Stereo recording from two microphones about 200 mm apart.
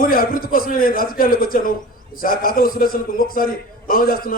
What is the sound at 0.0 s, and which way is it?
A man's voice, 45° left (ahead or behind).